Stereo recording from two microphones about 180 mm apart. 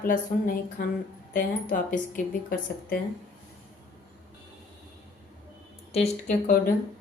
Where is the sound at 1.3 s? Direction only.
50° left (ahead or behind).